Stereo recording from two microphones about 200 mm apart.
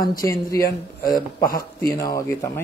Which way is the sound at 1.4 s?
45° left (ahead or behind).